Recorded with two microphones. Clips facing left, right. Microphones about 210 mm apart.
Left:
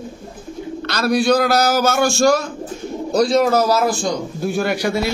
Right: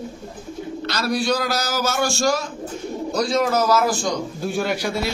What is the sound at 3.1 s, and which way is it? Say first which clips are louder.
Speech: left 6 dB; 35° left (ahead or behind).